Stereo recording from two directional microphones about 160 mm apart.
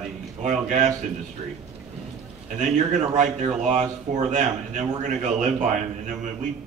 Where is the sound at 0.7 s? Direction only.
50° right (ahead or behind).